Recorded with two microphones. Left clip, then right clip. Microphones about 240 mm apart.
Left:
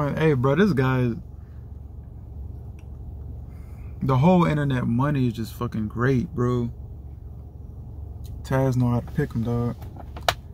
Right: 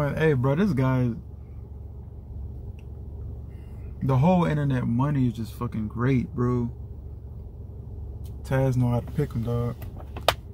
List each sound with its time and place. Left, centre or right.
0.0 s speech: centre
4.0 s speech: centre
8.5 s speech: centre